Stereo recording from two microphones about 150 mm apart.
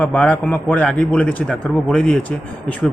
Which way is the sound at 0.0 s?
5° left (ahead or behind).